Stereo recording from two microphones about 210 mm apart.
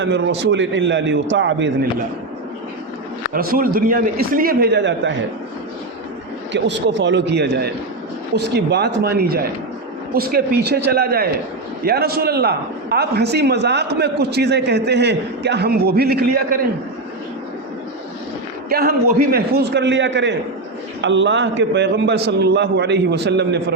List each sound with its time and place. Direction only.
0.0 s a man's voice: 55° right (ahead or behind)
3.3 s a man's voice: 45° right (ahead or behind)
6.5 s a man's voice: 55° right (ahead or behind)
18.7 s a man's voice: 45° right (ahead or behind)